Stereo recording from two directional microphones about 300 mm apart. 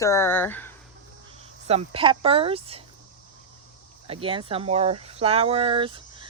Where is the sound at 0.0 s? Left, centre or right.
Centre.